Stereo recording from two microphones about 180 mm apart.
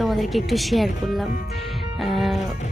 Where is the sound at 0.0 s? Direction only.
Centre (ahead or behind).